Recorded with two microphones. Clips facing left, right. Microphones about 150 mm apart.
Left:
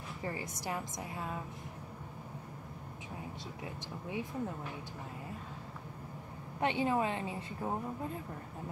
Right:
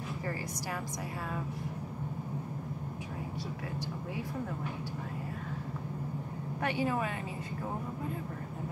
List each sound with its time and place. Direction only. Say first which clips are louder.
0.2 s a woman's voice: left 2 dB; 20° left (ahead or behind)
6.6 s a woman's voice: left 1 dB; 25° left (ahead or behind)